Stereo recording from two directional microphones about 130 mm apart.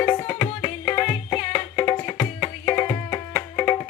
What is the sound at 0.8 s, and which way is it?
Music, 35° left (ahead or behind).